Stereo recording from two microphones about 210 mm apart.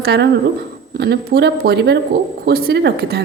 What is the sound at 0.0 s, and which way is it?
A woman's voice, 50° right (ahead or behind).